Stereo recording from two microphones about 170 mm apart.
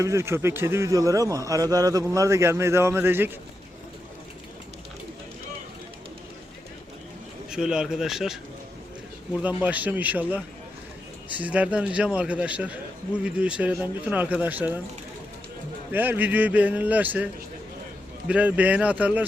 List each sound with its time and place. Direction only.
0.0 s a man's voice: 15° right (ahead or behind)
7.5 s speech: 5° right (ahead or behind)
15.9 s speech: 10° right (ahead or behind)
18.3 s speech: 10° right (ahead or behind)